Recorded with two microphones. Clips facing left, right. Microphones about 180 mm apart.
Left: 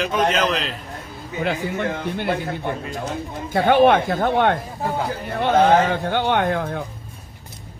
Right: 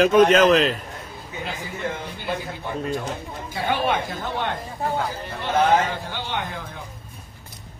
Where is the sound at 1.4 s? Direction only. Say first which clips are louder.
Left 7 dB; 65° left (ahead or behind).